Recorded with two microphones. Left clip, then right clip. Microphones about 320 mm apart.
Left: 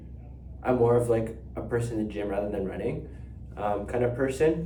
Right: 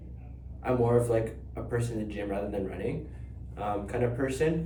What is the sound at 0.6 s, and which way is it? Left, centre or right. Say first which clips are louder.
Speech: left 3 dB; centre.